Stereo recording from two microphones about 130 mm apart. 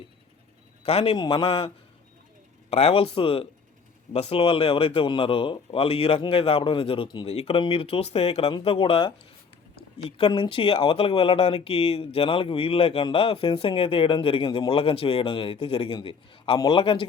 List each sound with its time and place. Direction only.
0.9 s speech: 50° left (ahead or behind)
1.1 s speech: 40° left (ahead or behind)
7.3 s speech: 50° left (ahead or behind)
10.2 s a man's voice: 45° left (ahead or behind)